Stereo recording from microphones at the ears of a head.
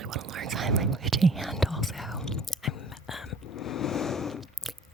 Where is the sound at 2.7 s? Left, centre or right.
Left.